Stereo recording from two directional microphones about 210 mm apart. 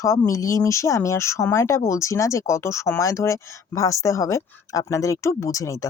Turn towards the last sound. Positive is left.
turn(degrees=15)  # may be behind; listen again after turning